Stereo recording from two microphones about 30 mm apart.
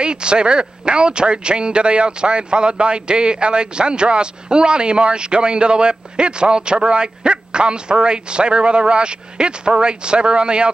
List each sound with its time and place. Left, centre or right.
0.0 s a man's voice: right